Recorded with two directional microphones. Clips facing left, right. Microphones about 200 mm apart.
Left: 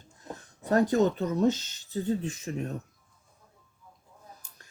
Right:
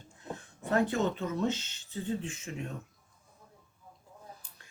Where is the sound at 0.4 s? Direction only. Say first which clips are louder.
Left 4 dB; 40° left (ahead or behind).